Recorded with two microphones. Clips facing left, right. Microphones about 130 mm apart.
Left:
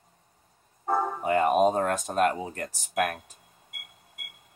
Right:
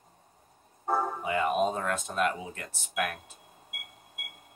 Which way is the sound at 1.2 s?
50° left (ahead or behind).